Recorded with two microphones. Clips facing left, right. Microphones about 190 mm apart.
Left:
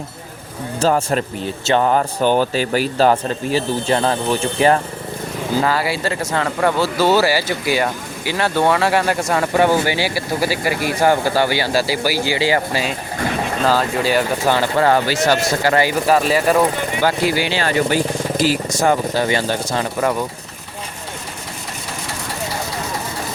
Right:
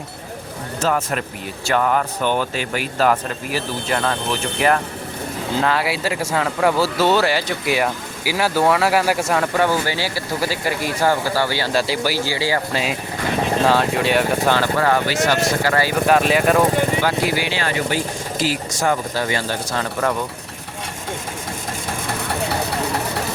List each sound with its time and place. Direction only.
0.8 s speech: 30° left (ahead or behind)
5.5 s speech: centre (ahead or behind)
9.6 s speech: 20° left (ahead or behind)
12.7 s speech: centre (ahead or behind)
14.8 s speech: 35° left (ahead or behind)
16.0 s speech: centre (ahead or behind)
17.0 s speech: 30° left (ahead or behind)
18.8 s speech: 25° left (ahead or behind)